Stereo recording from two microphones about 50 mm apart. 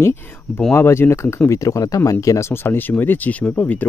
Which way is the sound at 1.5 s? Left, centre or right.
Left.